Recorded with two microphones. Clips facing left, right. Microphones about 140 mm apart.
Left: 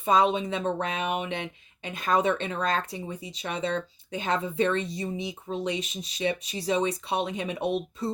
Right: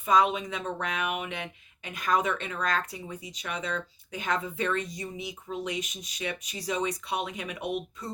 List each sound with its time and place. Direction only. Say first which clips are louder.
0.0 s speech: left 2 dB; 30° left (ahead or behind)